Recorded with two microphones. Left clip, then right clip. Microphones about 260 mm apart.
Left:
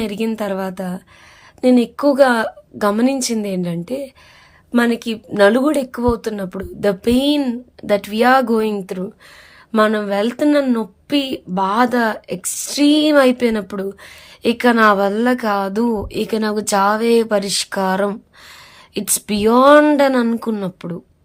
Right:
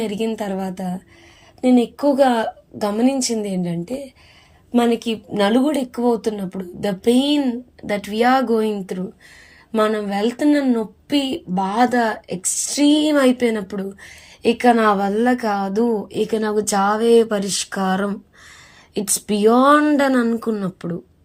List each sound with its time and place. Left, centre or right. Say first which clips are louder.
0.0 s a woman's voice: left 1 dB; centre